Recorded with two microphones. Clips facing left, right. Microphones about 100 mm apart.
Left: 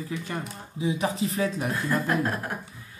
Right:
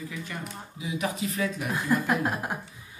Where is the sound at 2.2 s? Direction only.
15° right (ahead or behind).